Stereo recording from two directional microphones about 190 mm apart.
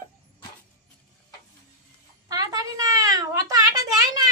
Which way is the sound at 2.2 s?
20° right (ahead or behind).